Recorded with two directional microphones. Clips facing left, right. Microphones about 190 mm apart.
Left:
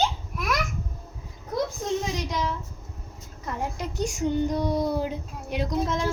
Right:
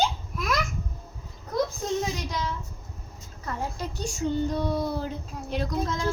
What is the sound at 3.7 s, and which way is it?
Child singing, 20° left (ahead or behind).